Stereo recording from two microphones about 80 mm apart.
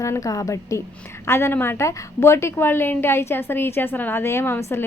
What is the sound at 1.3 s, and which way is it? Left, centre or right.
A woman's voice, left.